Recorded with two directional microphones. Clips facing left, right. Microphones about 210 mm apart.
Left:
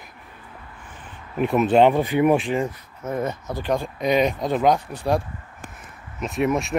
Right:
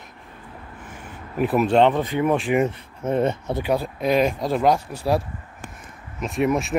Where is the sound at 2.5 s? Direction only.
25° right (ahead or behind).